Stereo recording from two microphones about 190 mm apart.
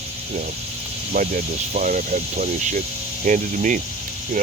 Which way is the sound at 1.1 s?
45° right (ahead or behind).